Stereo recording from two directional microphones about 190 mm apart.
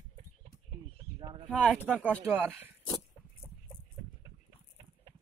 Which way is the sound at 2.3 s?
10° right (ahead or behind).